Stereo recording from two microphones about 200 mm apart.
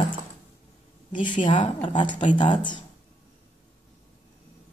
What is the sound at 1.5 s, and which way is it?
Speech, 25° left (ahead or behind).